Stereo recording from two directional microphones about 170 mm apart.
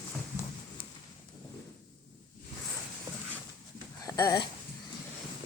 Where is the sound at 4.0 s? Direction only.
20° left (ahead or behind).